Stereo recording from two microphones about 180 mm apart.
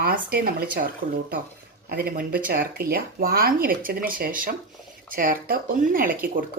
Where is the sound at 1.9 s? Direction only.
55° right (ahead or behind).